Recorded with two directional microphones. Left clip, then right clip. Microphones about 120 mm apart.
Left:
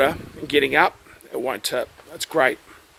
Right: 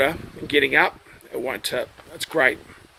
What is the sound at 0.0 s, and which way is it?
Speech, 35° left (ahead or behind).